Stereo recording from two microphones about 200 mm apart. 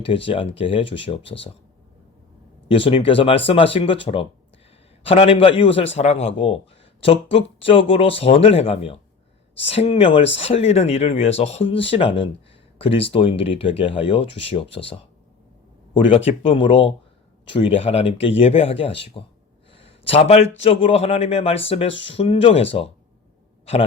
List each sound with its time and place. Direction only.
0.0 s speech: 25° left (ahead or behind)
2.6 s speech: 25° left (ahead or behind)
16.0 s speech: 25° left (ahead or behind)
19.7 s a sound: 30° left (ahead or behind)
20.6 s speech: 30° left (ahead or behind)
21.9 s speech: 65° left (ahead or behind)
22.2 s speech: 30° left (ahead or behind)